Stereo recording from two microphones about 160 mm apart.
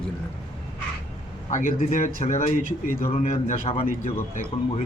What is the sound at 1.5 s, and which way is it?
A man's voice, 55° left (ahead or behind).